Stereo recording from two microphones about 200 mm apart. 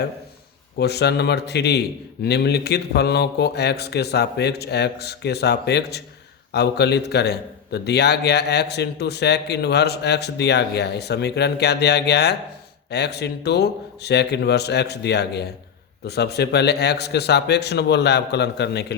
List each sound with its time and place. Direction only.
0.8 s a man's voice: 55° left (ahead or behind)